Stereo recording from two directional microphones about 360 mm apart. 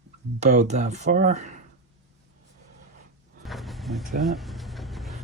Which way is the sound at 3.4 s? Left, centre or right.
Centre.